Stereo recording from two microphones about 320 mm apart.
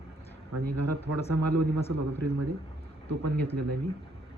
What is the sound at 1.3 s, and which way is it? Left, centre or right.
Speech, right.